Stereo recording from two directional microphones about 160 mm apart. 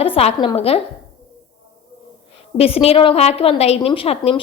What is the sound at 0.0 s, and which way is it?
Speech, 35° left (ahead or behind).